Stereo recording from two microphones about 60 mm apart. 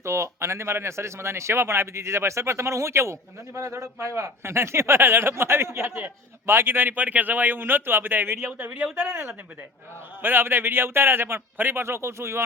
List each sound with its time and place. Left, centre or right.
0.0 s a man's voice: right